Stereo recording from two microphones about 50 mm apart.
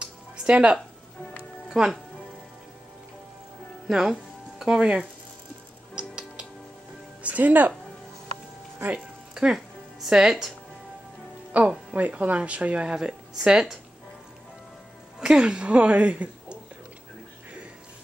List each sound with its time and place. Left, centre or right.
0.0 s a sound: right
1.7 s speech: centre
3.8 s speech: centre
4.1 s music: centre
5.9 s music: centre
7.2 s speech: right
9.3 s music: centre
9.9 s speech: centre
11.6 s speech: right; by 13.7 s centre
15.1 s a woman's voice: centre